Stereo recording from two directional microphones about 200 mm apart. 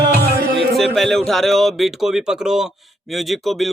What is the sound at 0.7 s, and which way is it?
Speech, centre (ahead or behind).